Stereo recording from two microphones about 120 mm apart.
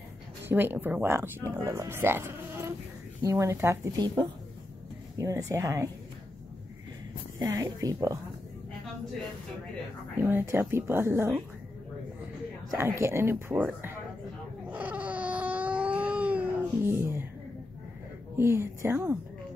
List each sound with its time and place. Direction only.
0.5 s speech: 15° right (ahead or behind)
7.3 s speech: 30° right (ahead or behind)
10.1 s speech: 20° right (ahead or behind)
12.7 s speech: 20° right (ahead or behind)
14.7 s baby cry: 15° right (ahead or behind)
18.4 s speech: 20° right (ahead or behind)